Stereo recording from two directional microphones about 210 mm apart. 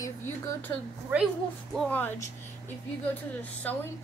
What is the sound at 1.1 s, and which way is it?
Speech, 10° right (ahead or behind).